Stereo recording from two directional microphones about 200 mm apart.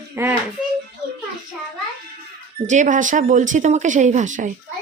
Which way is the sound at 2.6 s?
40° right (ahead or behind).